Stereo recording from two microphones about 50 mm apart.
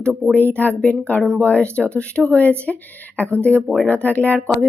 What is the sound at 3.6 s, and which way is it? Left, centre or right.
Speech, centre.